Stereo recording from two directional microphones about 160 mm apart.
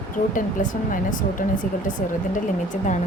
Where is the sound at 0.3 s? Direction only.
55° left (ahead or behind).